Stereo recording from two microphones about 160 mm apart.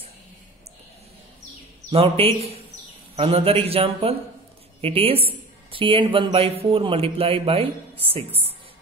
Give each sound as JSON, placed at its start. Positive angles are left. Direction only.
{"t": 1.9, "sound": "speech", "side_deg": -35}